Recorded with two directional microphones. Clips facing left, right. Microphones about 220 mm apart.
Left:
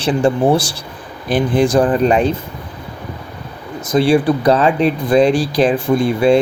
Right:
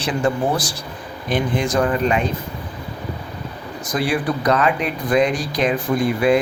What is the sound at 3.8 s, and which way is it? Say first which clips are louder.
Speech: left 8 dB; 25° left (ahead or behind).